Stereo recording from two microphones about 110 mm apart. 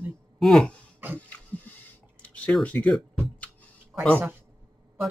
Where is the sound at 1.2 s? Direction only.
15° left (ahead or behind).